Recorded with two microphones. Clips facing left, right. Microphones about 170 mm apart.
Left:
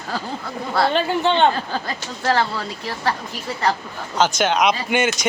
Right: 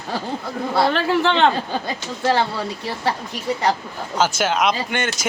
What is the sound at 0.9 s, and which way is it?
Speech, 90° right.